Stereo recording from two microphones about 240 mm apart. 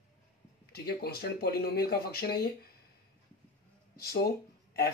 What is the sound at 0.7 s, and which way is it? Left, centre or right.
Speech, left.